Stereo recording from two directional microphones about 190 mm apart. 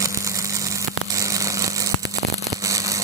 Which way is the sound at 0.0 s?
15° right (ahead or behind).